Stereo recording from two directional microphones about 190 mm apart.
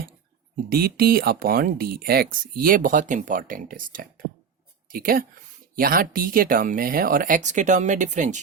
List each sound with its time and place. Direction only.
0.7 s speech: 55° right (ahead or behind)